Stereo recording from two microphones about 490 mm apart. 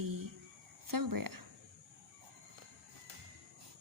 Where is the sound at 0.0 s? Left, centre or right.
Right.